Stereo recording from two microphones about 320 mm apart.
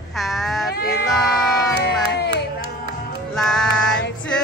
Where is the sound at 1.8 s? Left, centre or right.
Left.